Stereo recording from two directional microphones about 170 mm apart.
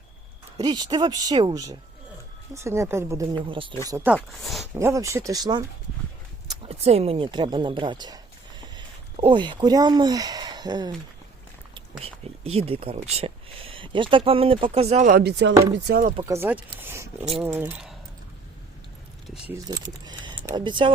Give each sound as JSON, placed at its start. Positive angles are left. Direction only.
{"t": 0.6, "sound": "speech", "side_deg": -25}
{"t": 3.3, "sound": "speech", "side_deg": -30}
{"t": 3.8, "sound": "speech", "side_deg": -15}
{"t": 6.7, "sound": "speech", "side_deg": -35}
{"t": 11.7, "sound": "speech", "side_deg": -35}
{"t": 15.2, "sound": "speech", "side_deg": -85}
{"t": 15.9, "sound": "speech", "side_deg": -55}
{"t": 16.2, "sound": "speech", "side_deg": -15}
{"t": 19.5, "sound": "speech", "side_deg": -20}